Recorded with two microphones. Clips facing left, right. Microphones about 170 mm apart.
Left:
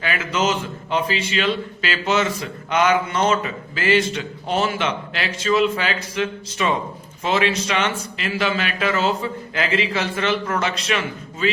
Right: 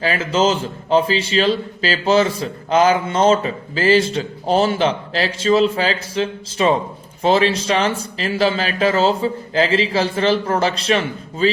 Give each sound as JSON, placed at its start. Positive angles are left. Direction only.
{"t": 0.0, "sound": "a man's voice", "side_deg": -30}